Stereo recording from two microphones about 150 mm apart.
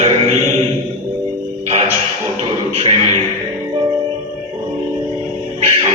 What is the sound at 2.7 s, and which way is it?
Music, 40° right (ahead or behind).